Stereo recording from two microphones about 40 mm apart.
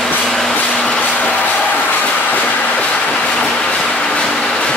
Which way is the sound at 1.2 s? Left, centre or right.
Left.